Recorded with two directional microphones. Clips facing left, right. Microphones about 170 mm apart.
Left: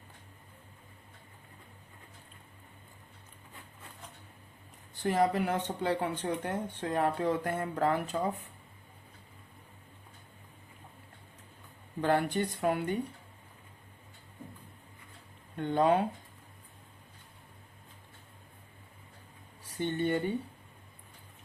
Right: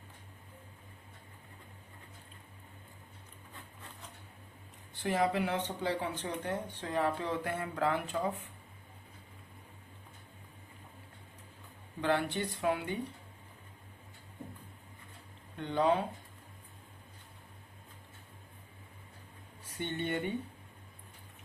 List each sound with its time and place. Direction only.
5.0 s speech: 45° left (ahead or behind)
11.9 s speech: 45° left (ahead or behind)
15.5 s speech: 50° left (ahead or behind)
19.7 s speech: 40° left (ahead or behind)